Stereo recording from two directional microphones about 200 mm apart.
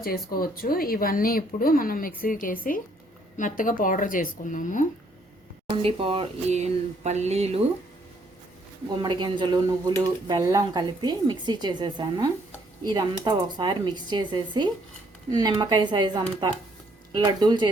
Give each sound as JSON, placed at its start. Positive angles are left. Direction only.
{"t": 0.0, "sound": "a woman's voice", "side_deg": 45}
{"t": 5.7, "sound": "speech", "side_deg": -25}
{"t": 9.0, "sound": "speech", "side_deg": -20}